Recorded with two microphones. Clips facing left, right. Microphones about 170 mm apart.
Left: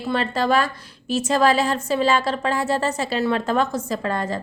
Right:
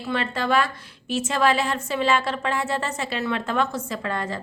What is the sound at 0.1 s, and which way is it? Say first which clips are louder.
A woman's voice: left 3 dB; 35° left (ahead or behind).